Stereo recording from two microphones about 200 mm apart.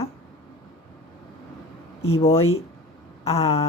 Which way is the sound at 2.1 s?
30° left (ahead or behind).